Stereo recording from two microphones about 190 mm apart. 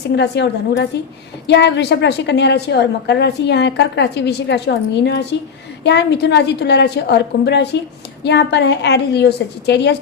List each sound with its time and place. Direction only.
0.2 s a woman's voice: 65° left (ahead or behind)